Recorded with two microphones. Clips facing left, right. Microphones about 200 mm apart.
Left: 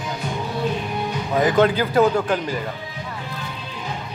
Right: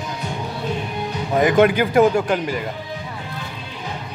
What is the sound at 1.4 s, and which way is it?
A man's voice, 15° right (ahead or behind).